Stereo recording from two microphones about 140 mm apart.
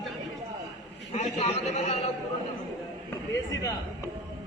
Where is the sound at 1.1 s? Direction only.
50° left (ahead or behind).